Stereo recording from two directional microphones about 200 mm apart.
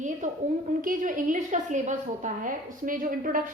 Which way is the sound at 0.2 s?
40° right (ahead or behind).